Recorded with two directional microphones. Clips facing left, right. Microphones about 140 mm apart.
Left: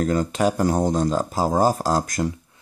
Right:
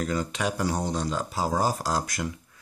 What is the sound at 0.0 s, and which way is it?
Speech, 45° left (ahead or behind).